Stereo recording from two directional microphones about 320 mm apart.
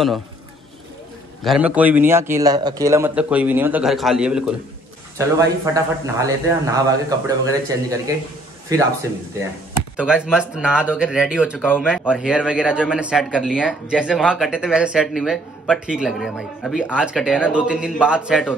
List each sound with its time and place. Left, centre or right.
1.4 s a man's voice: centre
9.9 s speech: centre